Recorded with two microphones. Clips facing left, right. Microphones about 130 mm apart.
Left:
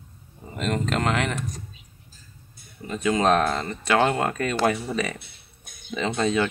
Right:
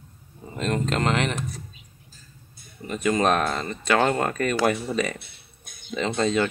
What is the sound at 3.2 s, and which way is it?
Speech, 30° left (ahead or behind).